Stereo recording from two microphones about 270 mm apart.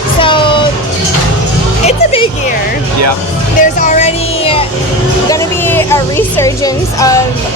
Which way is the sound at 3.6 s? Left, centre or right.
Left.